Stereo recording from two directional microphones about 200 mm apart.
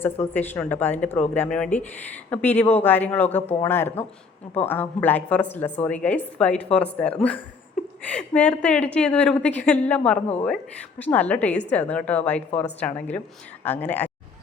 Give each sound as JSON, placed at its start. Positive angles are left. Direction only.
{"t": 0.0, "sound": "a woman's voice", "side_deg": 10}
{"t": 12.5, "sound": "a woman's voice", "side_deg": 30}
{"t": 12.8, "sound": "a woman's voice", "side_deg": 10}